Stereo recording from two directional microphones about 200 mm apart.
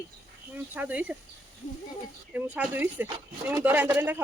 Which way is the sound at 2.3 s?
5° right (ahead or behind).